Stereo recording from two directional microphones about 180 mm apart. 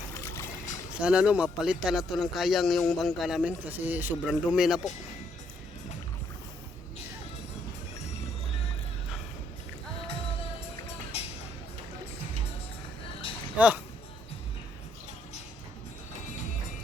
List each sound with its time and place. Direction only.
1.0 s speech: 5° right (ahead or behind)
11.1 s a sound: 35° left (ahead or behind)
13.6 s speech: 5° right (ahead or behind)